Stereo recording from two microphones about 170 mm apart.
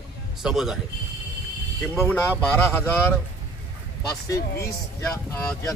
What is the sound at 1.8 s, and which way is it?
Speech, 15° left (ahead or behind).